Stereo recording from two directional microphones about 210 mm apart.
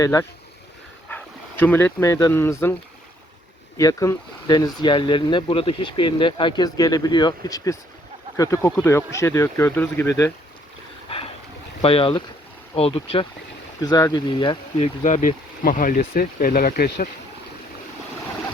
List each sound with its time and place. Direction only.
0.0 s speech: 15° left (ahead or behind)
1.6 s speech: 10° left (ahead or behind)
3.8 s speech: 15° left (ahead or behind)
11.8 s speech: 25° left (ahead or behind); by 17.1 s 45° left (ahead or behind)